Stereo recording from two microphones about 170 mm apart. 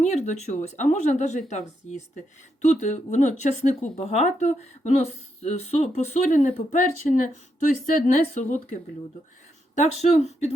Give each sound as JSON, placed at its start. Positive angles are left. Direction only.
{"t": 0.0, "sound": "speech", "side_deg": 45}